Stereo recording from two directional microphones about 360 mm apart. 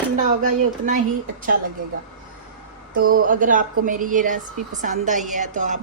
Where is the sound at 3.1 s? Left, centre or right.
Right.